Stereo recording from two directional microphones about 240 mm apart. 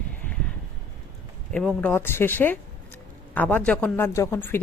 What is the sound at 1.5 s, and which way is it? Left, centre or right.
A woman's voice, centre.